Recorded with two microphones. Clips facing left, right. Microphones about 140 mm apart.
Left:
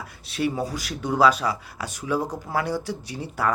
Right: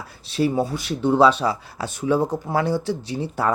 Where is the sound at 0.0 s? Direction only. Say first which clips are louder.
Right 4 dB; 30° right (ahead or behind).